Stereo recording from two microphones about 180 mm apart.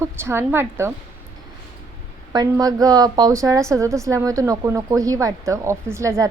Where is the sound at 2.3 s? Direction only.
20° right (ahead or behind).